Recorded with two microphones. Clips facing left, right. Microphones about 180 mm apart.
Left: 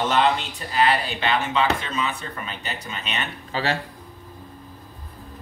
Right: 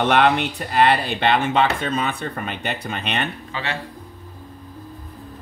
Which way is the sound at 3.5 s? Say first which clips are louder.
Left 3 dB; 35° left (ahead or behind).